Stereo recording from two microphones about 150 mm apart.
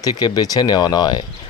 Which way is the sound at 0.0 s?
25° left (ahead or behind).